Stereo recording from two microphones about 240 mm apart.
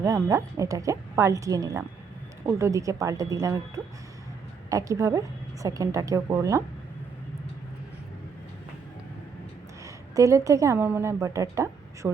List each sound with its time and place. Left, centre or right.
0.0 s speech: centre
4.7 s speech: centre
9.8 s a woman's voice: centre